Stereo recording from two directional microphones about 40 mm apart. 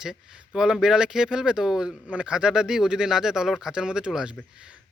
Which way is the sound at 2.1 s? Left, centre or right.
Right.